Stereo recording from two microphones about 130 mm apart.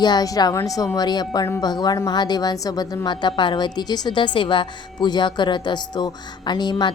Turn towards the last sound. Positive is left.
turn(degrees=35)  # may be behind; listen again after turning